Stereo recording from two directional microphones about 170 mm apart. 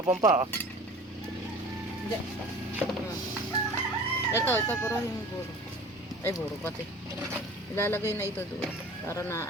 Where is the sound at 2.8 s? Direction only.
10° right (ahead or behind).